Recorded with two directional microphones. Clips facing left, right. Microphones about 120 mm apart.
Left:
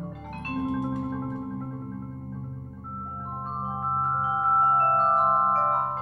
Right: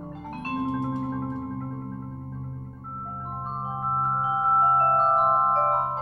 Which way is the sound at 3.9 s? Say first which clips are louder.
Right 2 dB; 15° right (ahead or behind).